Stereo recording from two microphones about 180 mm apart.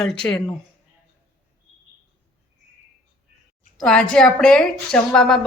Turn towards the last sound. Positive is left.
turn(degrees=5)  # may be behind; listen again after turning